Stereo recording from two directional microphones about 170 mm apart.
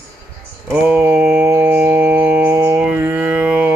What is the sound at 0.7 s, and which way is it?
Mantra, 10° right (ahead or behind).